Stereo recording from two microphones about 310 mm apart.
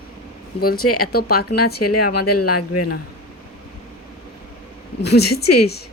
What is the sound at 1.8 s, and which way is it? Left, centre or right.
Speech, left.